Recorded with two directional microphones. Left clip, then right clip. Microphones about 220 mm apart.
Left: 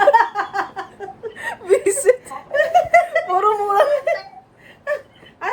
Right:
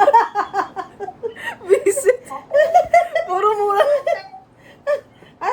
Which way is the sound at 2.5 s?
35° right (ahead or behind).